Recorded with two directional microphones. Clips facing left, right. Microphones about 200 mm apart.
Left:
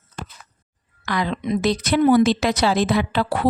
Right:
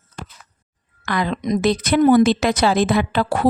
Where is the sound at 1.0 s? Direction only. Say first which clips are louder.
Right 2 dB; 50° right (ahead or behind).